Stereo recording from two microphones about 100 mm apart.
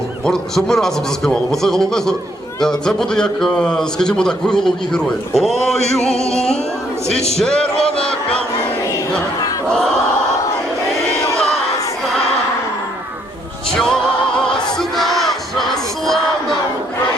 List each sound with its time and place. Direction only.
0.3 s speech: 5° left (ahead or behind)
7.1 s music: 90° left
7.3 s speech: 10° left (ahead or behind)
13.7 s battle cry: 5° left (ahead or behind)
16.0 s crowd: 5° left (ahead or behind)